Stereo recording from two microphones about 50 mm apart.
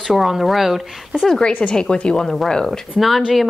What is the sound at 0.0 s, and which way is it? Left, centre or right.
Speech, centre.